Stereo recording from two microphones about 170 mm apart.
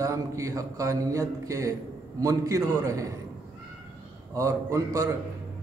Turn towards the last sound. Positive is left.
turn(degrees=-20)  # may be behind; listen again after turning